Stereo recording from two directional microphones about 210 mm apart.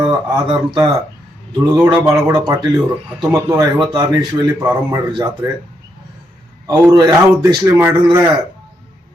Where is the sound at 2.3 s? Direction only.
20° right (ahead or behind).